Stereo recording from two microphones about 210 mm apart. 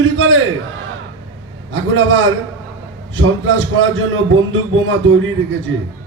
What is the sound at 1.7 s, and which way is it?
A man's voice, 65° right (ahead or behind).